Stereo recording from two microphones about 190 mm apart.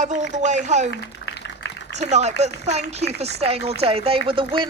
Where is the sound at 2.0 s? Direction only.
35° right (ahead or behind).